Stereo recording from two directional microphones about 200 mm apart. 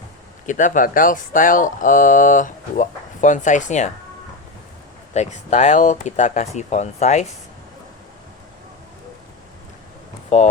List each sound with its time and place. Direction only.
0.4 s speech: 40° left (ahead or behind)
5.1 s speech: 35° left (ahead or behind)
10.2 s speech: 35° left (ahead or behind)